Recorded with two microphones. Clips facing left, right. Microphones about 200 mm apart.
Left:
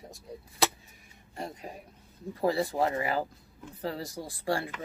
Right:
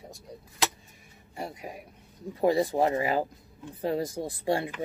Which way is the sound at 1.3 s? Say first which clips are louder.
Right 2 dB; 10° right (ahead or behind).